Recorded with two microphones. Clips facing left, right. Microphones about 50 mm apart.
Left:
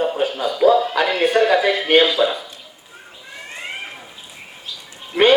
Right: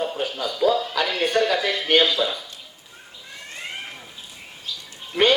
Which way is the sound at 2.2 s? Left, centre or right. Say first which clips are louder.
Left 6 dB; left.